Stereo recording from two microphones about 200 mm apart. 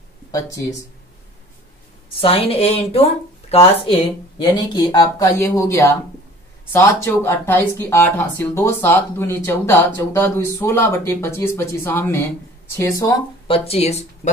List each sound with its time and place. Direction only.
0.3 s speech: 15° left (ahead or behind)
2.1 s speech: 30° left (ahead or behind)
13.5 s speech: 30° left (ahead or behind)